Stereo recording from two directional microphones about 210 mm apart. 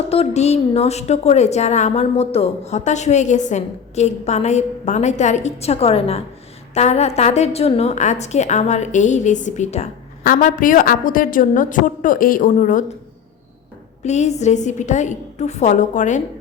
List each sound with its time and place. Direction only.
0.1 s a woman's voice: 30° left (ahead or behind)
14.0 s a woman's voice: 35° left (ahead or behind)